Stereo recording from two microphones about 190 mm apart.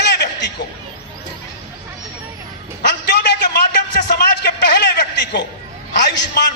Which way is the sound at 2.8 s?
60° left (ahead or behind).